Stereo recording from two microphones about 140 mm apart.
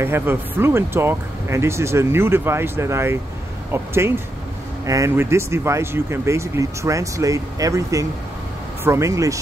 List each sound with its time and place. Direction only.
0.0 s speech: 15° right (ahead or behind)